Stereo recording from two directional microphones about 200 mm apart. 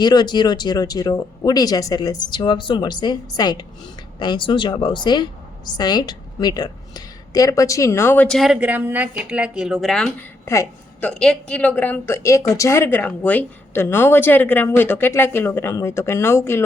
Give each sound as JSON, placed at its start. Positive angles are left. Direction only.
{"t": 0.0, "sound": "a woman's voice", "side_deg": 20}
{"t": 11.1, "sound": "a woman's voice", "side_deg": 5}